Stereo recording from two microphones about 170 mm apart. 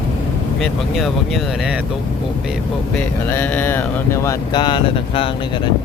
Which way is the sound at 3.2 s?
10° left (ahead or behind).